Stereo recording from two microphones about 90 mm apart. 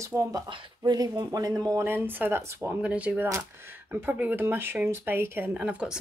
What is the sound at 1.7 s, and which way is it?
Speech, 25° right (ahead or behind).